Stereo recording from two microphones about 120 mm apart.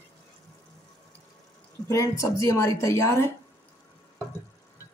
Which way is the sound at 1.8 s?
25° left (ahead or behind).